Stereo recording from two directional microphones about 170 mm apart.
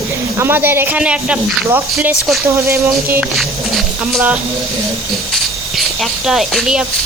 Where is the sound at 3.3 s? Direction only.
Centre (ahead or behind).